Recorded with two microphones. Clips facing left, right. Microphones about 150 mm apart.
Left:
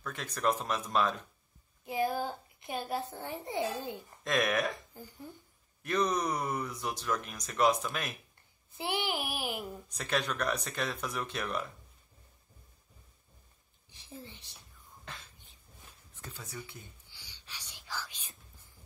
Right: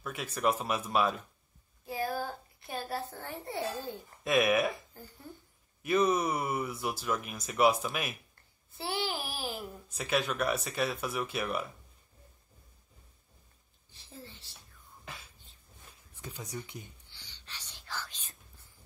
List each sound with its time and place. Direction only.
0.0 s speech: 10° right (ahead or behind)
1.9 s a child's voice: 20° left (ahead or behind)
4.2 s speech: 5° right (ahead or behind)
4.9 s speech: 15° left (ahead or behind)
5.8 s speech: 5° right (ahead or behind)
8.7 s child singing: 15° left (ahead or behind)
9.8 s speech: 5° right (ahead or behind)
13.8 s a sound: 15° left (ahead or behind)
15.1 s a sound: 5° right (ahead or behind)
16.1 s speech: 15° right (ahead or behind)
17.1 s whispering: 10° left (ahead or behind)